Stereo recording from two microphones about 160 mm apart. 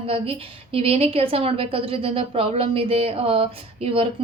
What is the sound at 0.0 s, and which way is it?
A woman's voice, 35° right (ahead or behind).